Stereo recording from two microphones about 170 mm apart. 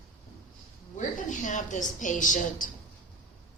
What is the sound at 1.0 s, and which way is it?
A woman's voice, 45° left (ahead or behind).